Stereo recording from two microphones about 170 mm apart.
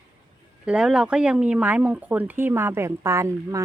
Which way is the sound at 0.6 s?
5° right (ahead or behind).